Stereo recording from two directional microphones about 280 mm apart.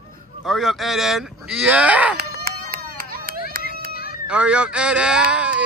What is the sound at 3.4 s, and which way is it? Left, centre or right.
Run, left.